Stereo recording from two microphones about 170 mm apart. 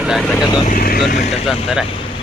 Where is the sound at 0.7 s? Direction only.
60° left (ahead or behind).